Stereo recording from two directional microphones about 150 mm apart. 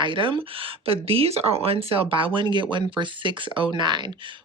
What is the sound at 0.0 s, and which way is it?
Speech, 35° right (ahead or behind).